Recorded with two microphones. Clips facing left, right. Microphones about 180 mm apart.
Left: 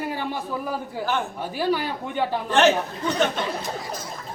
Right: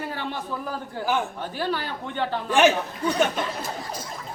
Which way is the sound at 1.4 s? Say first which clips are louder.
Left 4 dB; 10° left (ahead or behind).